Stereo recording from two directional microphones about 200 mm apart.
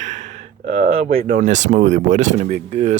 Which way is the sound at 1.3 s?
40° right (ahead or behind).